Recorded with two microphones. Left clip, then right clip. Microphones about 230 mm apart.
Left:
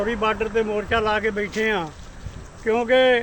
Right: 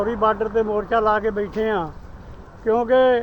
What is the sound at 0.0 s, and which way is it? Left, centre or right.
Speech, left.